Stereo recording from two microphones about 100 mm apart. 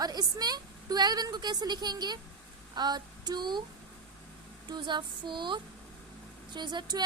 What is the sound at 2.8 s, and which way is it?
Female singing, 45° right (ahead or behind).